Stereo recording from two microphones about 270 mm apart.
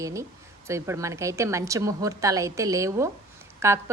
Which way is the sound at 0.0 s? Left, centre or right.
Centre.